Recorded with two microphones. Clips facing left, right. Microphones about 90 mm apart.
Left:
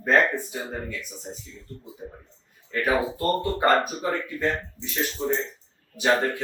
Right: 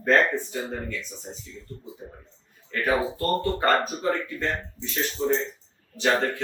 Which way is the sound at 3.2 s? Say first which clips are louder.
Left 1 dB; 15° left (ahead or behind).